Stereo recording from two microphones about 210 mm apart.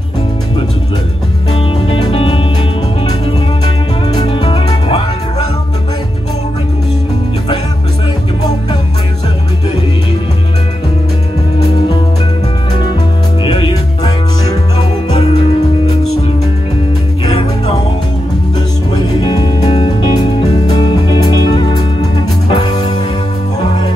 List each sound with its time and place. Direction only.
1.5 s music: 25° left (ahead or behind)
4.1 s music: 20° left (ahead or behind)
13.4 s music: 20° left (ahead or behind)
17.3 s music: 25° left (ahead or behind)
18.9 s music: 20° left (ahead or behind)